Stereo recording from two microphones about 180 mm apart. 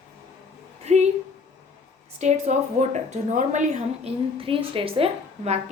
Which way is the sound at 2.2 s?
40° right (ahead or behind).